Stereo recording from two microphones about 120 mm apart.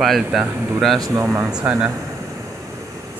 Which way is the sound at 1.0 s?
25° right (ahead or behind).